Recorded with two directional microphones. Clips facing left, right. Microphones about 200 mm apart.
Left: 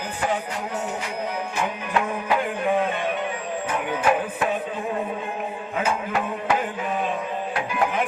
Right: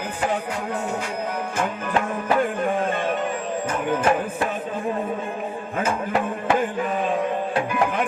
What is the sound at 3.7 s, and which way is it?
Music, 45° right (ahead or behind).